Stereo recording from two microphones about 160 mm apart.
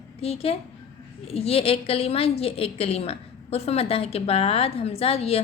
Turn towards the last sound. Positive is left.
turn(degrees=40)  # may be behind; listen again after turning